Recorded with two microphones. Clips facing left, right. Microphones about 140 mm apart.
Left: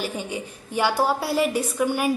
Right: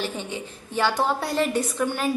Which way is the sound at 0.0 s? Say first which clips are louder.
Left 1 dB; 10° left (ahead or behind).